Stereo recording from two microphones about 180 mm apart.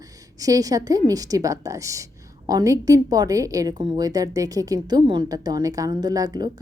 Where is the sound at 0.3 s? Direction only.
20° right (ahead or behind).